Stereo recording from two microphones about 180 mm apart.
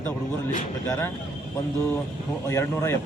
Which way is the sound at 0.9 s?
15° left (ahead or behind).